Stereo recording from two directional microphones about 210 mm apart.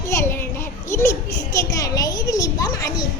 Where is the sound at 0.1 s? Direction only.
10° left (ahead or behind).